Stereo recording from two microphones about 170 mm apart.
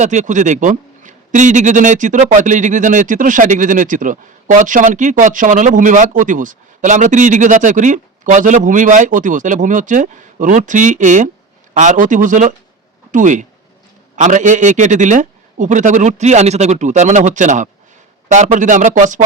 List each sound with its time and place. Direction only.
0.0 s a man's voice: 45° right (ahead or behind)